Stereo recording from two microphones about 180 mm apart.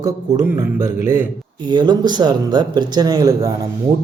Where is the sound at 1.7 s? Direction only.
25° right (ahead or behind).